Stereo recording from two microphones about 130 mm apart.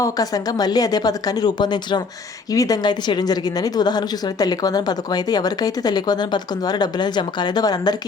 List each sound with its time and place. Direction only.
0.0 s a woman's voice: 30° left (ahead or behind)